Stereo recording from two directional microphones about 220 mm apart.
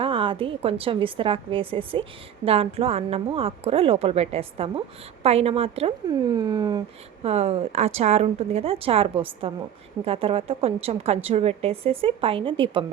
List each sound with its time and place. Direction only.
0.0 s a woman's voice: 25° right (ahead or behind)